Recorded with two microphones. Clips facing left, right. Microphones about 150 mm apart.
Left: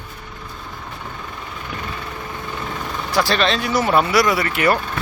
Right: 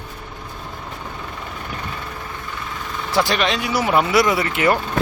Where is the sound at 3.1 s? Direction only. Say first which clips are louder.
Left 1 dB; 20° right (ahead or behind).